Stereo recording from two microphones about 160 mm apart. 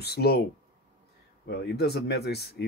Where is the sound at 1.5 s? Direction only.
90° left.